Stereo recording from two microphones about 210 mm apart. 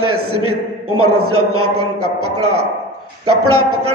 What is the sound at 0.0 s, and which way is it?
A man's voice, 90° right.